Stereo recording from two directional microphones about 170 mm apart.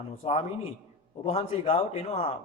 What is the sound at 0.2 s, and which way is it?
A man's voice, 40° left (ahead or behind).